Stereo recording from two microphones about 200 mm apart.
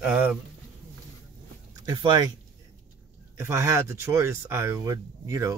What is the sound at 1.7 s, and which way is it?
Speech, 20° right (ahead or behind).